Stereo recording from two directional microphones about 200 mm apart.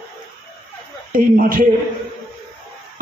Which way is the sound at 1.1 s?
45° right (ahead or behind).